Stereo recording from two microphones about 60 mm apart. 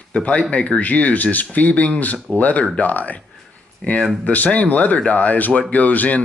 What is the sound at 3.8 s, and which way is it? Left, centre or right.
Speech, centre.